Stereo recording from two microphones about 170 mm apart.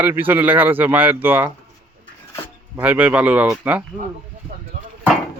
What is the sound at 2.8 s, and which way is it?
A man's voice, 10° right (ahead or behind).